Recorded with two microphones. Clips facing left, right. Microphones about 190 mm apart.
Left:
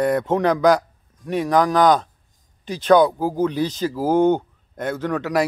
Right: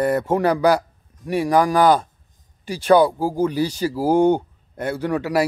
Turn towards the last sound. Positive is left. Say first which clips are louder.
# right 1 dB
turn(degrees=-10)  # may be behind; listen again after turning